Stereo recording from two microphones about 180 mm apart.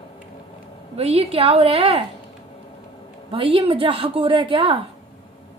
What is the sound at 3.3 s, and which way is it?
A woman's voice, 30° right (ahead or behind).